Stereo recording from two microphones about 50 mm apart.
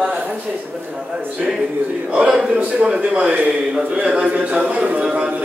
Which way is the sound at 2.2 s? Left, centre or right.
Centre.